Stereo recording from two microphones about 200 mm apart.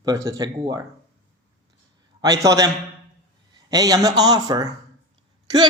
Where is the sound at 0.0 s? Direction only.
15° right (ahead or behind).